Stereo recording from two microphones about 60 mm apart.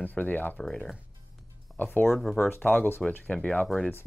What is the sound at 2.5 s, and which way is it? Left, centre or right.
Speech, left.